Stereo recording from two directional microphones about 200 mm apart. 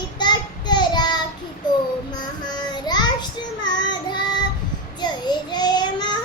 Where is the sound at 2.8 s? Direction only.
20° left (ahead or behind).